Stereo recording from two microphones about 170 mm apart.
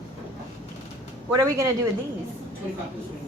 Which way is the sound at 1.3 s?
20° right (ahead or behind).